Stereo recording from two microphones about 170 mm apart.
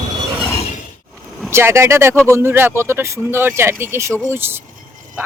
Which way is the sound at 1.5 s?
15° right (ahead or behind).